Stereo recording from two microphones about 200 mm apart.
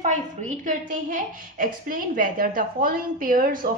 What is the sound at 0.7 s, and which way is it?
A woman's voice, 40° right (ahead or behind).